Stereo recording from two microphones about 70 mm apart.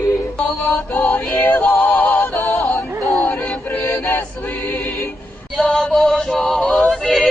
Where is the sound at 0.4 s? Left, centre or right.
Left.